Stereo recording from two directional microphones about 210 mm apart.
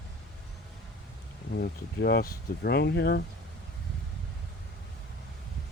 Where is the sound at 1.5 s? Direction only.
50° left (ahead or behind).